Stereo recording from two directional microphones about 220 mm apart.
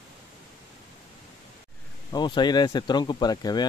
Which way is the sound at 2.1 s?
20° left (ahead or behind).